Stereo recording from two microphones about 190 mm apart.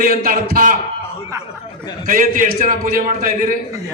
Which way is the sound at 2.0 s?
45° right (ahead or behind).